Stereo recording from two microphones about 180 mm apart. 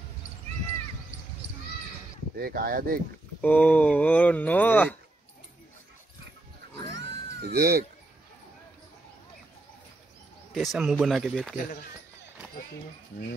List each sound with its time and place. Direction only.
2.3 s speech: 55° right (ahead or behind)
3.3 s speech: 10° left (ahead or behind)
7.0 s cat: 65° right (ahead or behind)
10.5 s speech: centre (ahead or behind)